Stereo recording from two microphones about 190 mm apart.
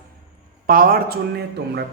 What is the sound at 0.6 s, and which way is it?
Speech, 50° right (ahead or behind).